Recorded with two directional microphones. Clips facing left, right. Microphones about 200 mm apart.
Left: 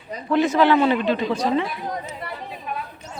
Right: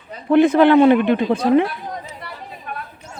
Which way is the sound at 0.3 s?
55° right (ahead or behind).